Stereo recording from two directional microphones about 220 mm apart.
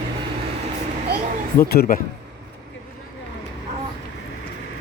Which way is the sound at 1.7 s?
45° left (ahead or behind).